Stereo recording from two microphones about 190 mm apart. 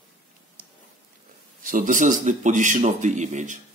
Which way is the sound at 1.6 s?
45° right (ahead or behind).